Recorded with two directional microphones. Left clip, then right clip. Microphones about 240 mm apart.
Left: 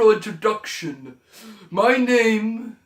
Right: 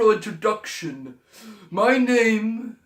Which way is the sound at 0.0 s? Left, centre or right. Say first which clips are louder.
Left 2 dB; centre.